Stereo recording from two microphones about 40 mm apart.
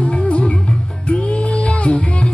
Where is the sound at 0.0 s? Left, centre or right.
Left.